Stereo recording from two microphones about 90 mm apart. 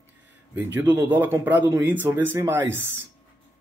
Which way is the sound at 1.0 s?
20° right (ahead or behind).